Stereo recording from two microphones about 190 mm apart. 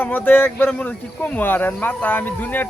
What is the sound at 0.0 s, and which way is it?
Speech, 10° left (ahead or behind).